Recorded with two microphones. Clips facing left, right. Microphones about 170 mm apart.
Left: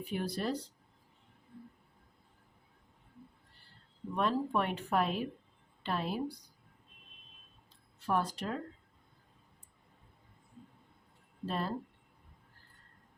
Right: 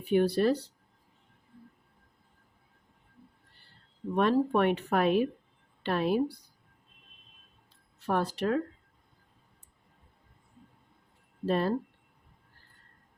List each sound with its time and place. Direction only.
0.0 s a woman's voice: 70° right (ahead or behind)
4.1 s a woman's voice: 65° right (ahead or behind)
8.0 s a woman's voice: 70° right (ahead or behind)
11.4 s a woman's voice: 70° right (ahead or behind)